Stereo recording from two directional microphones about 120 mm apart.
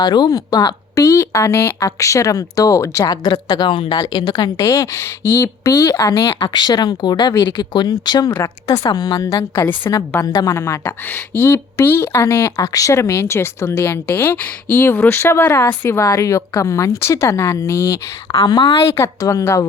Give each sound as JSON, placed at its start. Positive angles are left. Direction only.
{"t": 0.0, "sound": "speech", "side_deg": 35}
{"t": 18.4, "sound": "speech", "side_deg": 35}
{"t": 18.9, "sound": "speech", "side_deg": 25}